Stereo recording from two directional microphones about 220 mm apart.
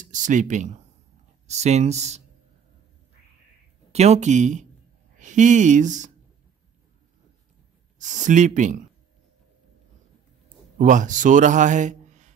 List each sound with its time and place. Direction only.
0.0 s speech: 35° right (ahead or behind)
3.9 s speech: 30° right (ahead or behind)
8.0 s speech: 35° right (ahead or behind)
10.8 s a man's voice: 35° right (ahead or behind)